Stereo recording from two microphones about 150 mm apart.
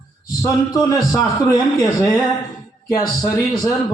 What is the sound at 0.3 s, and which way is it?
A man's voice, 25° left (ahead or behind).